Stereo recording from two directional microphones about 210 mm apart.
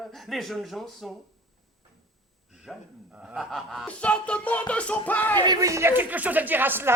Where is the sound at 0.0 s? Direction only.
Centre (ahead or behind).